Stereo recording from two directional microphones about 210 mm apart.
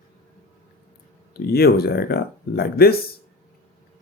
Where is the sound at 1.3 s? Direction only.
45° left (ahead or behind).